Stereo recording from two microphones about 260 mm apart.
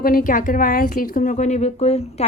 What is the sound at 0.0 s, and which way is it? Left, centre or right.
A woman's voice, left.